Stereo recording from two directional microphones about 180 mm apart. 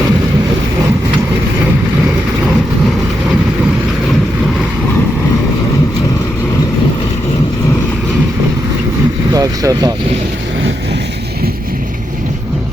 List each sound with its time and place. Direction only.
9.3 s vehicle: 20° right (ahead or behind)